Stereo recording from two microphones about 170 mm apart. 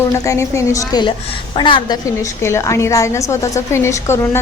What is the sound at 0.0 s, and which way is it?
A woman's voice, 15° left (ahead or behind).